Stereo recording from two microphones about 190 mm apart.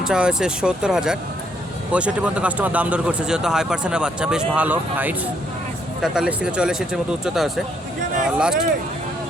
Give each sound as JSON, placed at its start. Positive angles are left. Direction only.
{"t": 0.0, "sound": "speech", "side_deg": -5}